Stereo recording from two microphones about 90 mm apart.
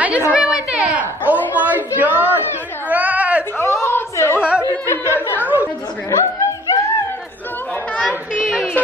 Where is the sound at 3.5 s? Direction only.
30° left (ahead or behind).